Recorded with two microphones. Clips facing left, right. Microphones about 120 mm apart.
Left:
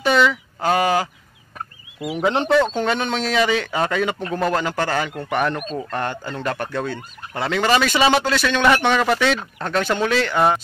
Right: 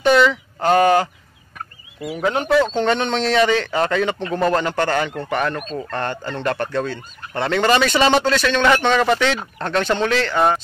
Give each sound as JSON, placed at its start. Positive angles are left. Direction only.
{"t": 0.0, "sound": "a sound", "side_deg": 0}
{"t": 2.0, "sound": "speech", "side_deg": 20}
{"t": 2.6, "sound": "speech", "side_deg": 10}